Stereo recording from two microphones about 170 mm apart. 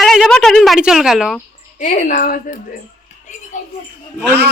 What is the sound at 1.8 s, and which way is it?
Speech, 50° left (ahead or behind).